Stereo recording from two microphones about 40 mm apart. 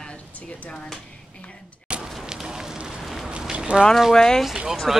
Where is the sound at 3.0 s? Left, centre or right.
Centre.